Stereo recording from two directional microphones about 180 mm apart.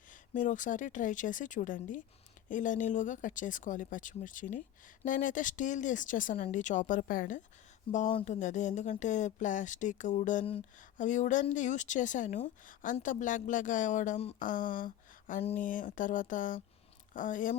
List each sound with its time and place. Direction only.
0.1 s a woman's voice: 45° left (ahead or behind)
15.4 s speech: 35° left (ahead or behind)
15.6 s a woman's voice: 45° left (ahead or behind)